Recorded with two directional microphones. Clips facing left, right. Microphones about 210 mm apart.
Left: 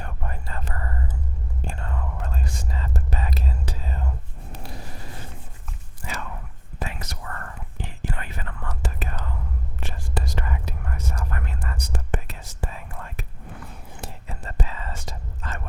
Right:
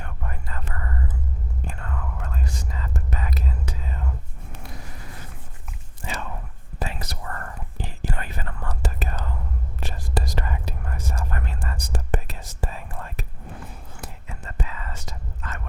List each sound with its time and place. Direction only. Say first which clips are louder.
0.0 s whispering: left 2 dB; 30° left (ahead or behind)
4.5 s a sound: left 2 dB; 30° left (ahead or behind)
6.0 s whispering: right 2 dB; 25° right (ahead or behind)
13.9 s whispering: left 2 dB; 30° left (ahead or behind)